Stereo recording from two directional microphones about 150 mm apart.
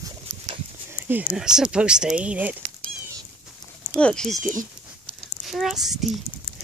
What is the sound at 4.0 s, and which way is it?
Speech, 5° left (ahead or behind).